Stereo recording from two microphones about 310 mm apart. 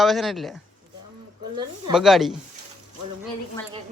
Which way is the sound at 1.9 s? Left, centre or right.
Centre.